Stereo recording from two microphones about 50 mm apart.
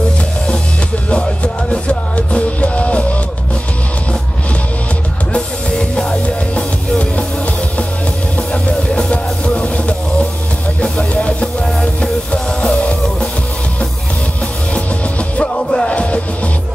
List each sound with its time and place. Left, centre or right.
1.1 s music: left
5.3 s music: centre
8.6 s music: left
15.1 s music: left